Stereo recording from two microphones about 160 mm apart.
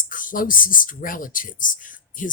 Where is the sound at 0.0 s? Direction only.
55° left (ahead or behind).